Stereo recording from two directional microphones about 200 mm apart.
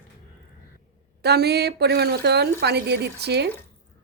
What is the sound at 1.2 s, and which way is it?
Speech, 55° right (ahead or behind).